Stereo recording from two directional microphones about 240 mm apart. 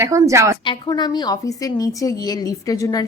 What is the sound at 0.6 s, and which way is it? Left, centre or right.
A woman's voice, centre.